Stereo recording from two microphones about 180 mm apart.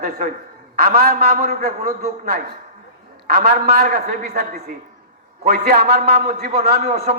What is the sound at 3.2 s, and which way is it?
A man's voice, 65° right (ahead or behind).